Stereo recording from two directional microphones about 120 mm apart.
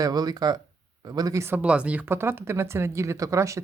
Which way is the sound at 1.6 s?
10° right (ahead or behind).